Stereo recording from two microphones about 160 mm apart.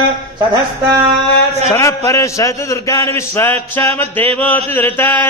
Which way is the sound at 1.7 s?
20° left (ahead or behind).